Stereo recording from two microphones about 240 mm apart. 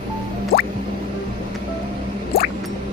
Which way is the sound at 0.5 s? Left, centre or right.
Left.